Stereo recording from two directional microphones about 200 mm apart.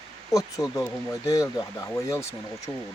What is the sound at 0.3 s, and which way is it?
Speech, 15° left (ahead or behind).